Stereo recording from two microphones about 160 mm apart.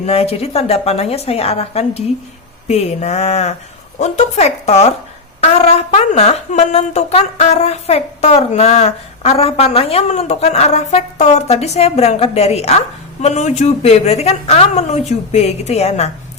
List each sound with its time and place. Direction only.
0.0 s a woman's voice: 40° left (ahead or behind)